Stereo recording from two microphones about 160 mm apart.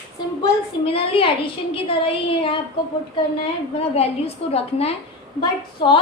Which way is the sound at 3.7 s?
40° left (ahead or behind).